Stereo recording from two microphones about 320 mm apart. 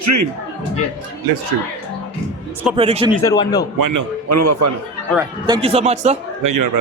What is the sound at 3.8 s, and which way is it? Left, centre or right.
Speech, right.